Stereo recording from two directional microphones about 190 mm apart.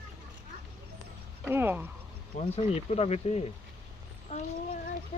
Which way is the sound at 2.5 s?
35° left (ahead or behind).